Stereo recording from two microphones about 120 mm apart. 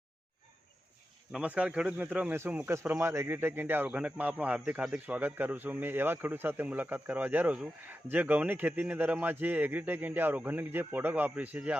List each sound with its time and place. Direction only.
1.3 s speech: 10° right (ahead or behind)